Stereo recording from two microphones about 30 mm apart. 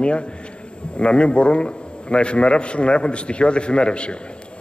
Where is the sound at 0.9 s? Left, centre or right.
Left.